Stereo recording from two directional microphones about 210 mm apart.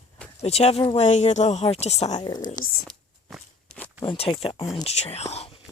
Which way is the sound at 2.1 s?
20° left (ahead or behind).